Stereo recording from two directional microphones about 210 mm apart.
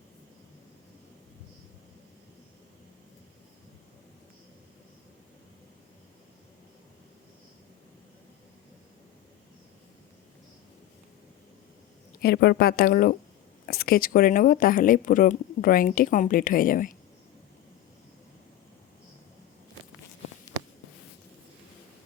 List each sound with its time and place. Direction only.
12.2 s a woman's voice: 50° left (ahead or behind)